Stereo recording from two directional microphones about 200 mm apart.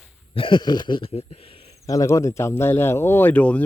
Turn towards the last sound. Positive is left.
turn(degrees=5)  # may be behind; listen again after turning